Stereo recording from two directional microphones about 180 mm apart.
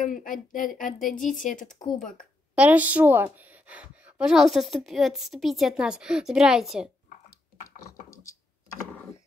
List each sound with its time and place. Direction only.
0.0 s speech: 45° left (ahead or behind)
2.5 s a woman's voice: 10° right (ahead or behind)